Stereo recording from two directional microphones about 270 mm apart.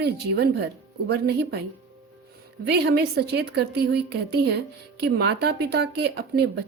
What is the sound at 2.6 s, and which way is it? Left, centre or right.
Speech, right.